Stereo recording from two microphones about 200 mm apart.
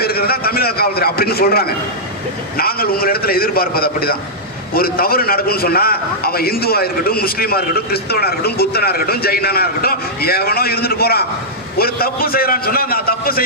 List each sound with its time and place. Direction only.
0.0 s a man's voice: 50° left (ahead or behind)